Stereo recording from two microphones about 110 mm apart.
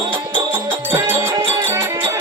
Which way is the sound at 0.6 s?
45° right (ahead or behind).